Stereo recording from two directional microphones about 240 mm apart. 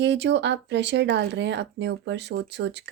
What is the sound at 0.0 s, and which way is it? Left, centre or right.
Speech, right.